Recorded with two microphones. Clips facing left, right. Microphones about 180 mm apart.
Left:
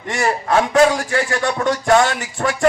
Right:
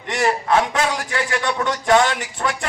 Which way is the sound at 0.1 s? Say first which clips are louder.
Even; 45° left (ahead or behind).